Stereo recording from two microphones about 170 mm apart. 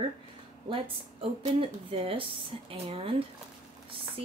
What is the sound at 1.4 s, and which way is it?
A woman's voice, 35° right (ahead or behind).